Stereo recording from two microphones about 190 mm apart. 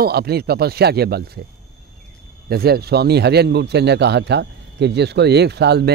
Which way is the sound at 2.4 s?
55° right (ahead or behind).